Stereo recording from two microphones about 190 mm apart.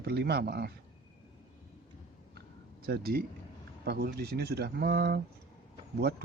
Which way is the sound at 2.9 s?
55° right (ahead or behind).